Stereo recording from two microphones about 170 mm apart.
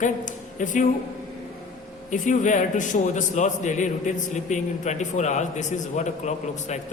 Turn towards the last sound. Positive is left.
turn(degrees=45)  # may be behind; listen again after turning